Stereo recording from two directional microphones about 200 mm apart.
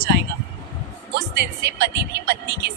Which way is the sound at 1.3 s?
55° right (ahead or behind).